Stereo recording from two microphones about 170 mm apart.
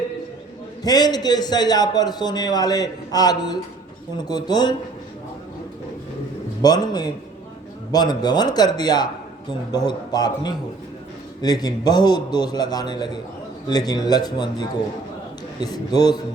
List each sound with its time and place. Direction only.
0.8 s a man's voice: 25° left (ahead or behind)
6.6 s a man's voice: 25° left (ahead or behind)
15.6 s a man's voice: 25° left (ahead or behind)